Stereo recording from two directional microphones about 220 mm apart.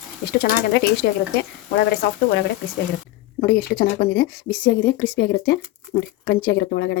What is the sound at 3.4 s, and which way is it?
Speech, 45° left (ahead or behind).